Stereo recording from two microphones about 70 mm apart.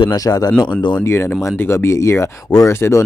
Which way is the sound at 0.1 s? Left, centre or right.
Left.